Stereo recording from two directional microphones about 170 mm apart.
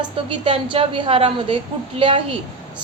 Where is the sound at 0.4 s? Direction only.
30° right (ahead or behind).